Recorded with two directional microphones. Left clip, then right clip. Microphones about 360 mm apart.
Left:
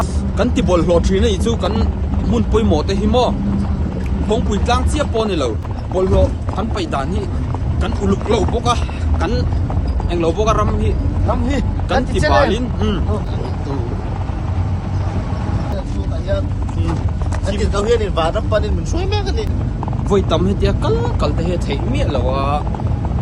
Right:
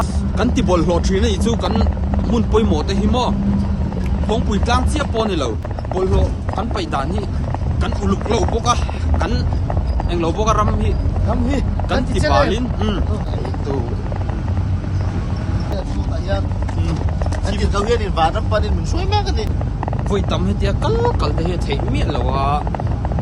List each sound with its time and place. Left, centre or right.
0.0 s speech: centre
12.3 s speech: centre
17.6 s speech: centre